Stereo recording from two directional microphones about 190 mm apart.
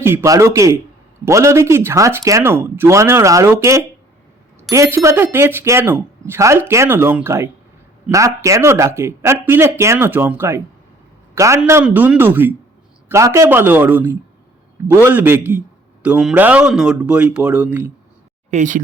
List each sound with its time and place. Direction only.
0.0 s speech: 10° right (ahead or behind)
18.5 s speech: 40° right (ahead or behind)